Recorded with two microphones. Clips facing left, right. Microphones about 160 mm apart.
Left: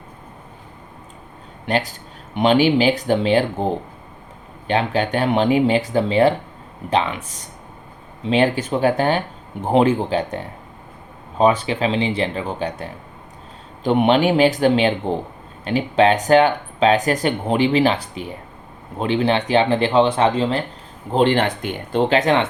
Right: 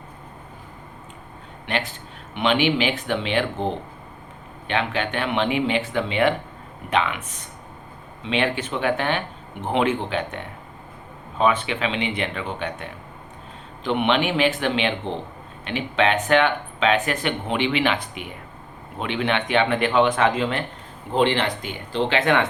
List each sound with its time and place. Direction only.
1.6 s speech: 40° left (ahead or behind)